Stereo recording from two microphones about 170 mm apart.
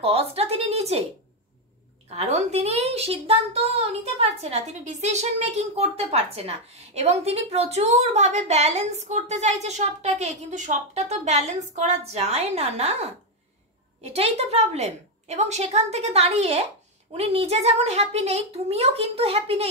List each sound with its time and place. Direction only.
0.0 s a woman's voice: 35° right (ahead or behind)
2.0 s a woman's voice: 40° right (ahead or behind)